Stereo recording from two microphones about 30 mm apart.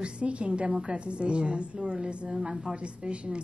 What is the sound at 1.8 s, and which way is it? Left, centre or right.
A woman's voice, right.